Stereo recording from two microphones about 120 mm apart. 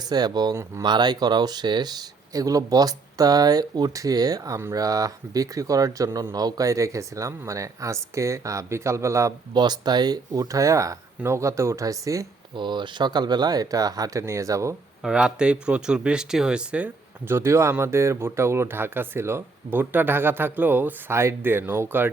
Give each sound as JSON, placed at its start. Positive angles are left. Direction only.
{"t": 0.1, "sound": "speech", "side_deg": -35}
{"t": 9.5, "sound": "speech", "side_deg": -35}
{"t": 12.5, "sound": "speech", "side_deg": -40}
{"t": 15.0, "sound": "speech", "side_deg": -10}